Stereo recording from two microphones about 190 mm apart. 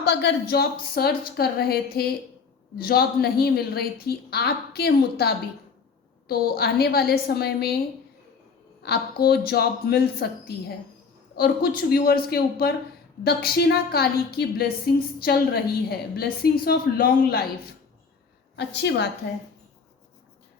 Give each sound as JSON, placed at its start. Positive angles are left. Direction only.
{"t": 0.0, "sound": "a woman's voice", "side_deg": 60}
{"t": 8.8, "sound": "a woman's voice", "side_deg": 55}
{"t": 18.5, "sound": "a woman's voice", "side_deg": 65}